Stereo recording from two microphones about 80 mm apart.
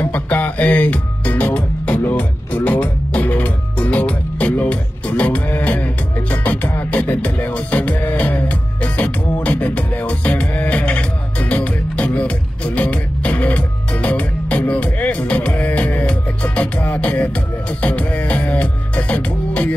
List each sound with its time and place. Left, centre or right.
0.0 s music: left